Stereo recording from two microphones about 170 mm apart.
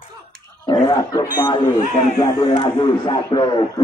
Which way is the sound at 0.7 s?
25° left (ahead or behind).